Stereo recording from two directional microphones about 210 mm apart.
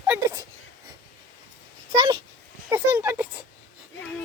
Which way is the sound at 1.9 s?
20° right (ahead or behind).